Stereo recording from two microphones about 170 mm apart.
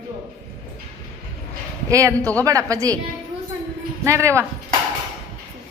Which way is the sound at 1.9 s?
20° right (ahead or behind).